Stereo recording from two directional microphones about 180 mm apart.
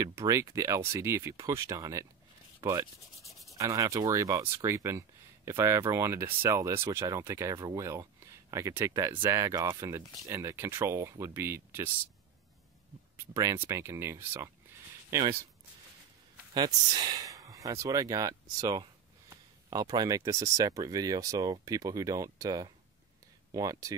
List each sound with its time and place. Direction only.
0.0 s speech: 15° right (ahead or behind)
3.3 s sanding: centre (ahead or behind)
3.5 s speech: 15° right (ahead or behind)
13.2 s speech: 15° right (ahead or behind)
16.5 s speech: 20° right (ahead or behind)